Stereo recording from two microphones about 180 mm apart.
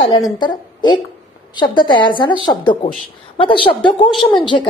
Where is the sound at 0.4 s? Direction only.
25° left (ahead or behind).